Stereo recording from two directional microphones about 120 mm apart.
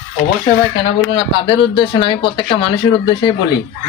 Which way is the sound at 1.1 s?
45° left (ahead or behind).